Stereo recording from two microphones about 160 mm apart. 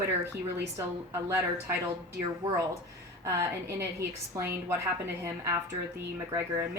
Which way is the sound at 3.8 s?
15° right (ahead or behind).